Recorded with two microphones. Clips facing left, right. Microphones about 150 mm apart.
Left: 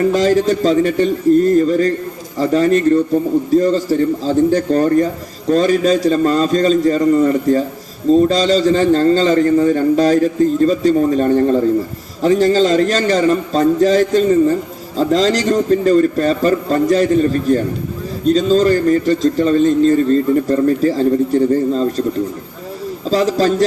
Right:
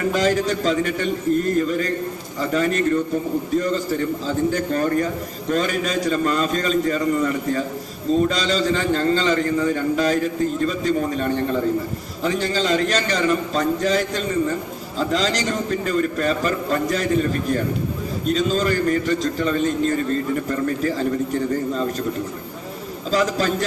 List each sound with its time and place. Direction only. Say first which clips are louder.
0.1 s a man's voice: left 6 dB; 35° left (ahead or behind)
23.0 s a man's voice: left 6 dB; 35° left (ahead or behind)